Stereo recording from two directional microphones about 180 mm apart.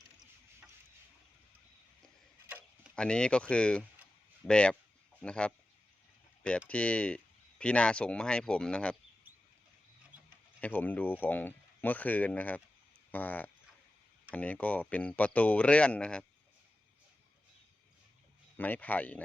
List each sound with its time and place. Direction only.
2.5 s tick-tock: 10° right (ahead or behind)
2.9 s speech: 5° left (ahead or behind)
6.7 s speech: 5° left (ahead or behind)
10.6 s speech: 10° left (ahead or behind)
18.5 s speech: 10° left (ahead or behind)